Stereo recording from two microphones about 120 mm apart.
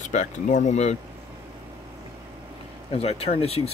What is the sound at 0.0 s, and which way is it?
Speech, 85° left.